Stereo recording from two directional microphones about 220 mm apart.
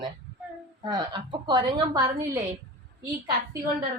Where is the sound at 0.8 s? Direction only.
20° right (ahead or behind).